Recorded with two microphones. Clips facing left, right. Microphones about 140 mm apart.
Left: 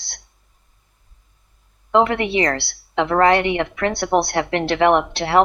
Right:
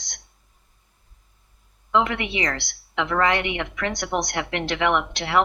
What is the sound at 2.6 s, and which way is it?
Speech, 30° left (ahead or behind).